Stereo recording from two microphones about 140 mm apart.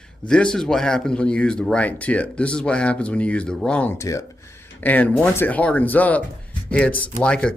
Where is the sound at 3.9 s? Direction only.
20° left (ahead or behind).